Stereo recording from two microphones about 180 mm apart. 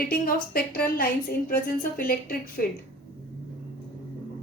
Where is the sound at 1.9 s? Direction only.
50° left (ahead or behind).